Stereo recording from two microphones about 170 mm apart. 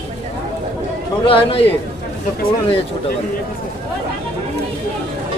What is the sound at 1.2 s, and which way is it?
Speech, 30° left (ahead or behind).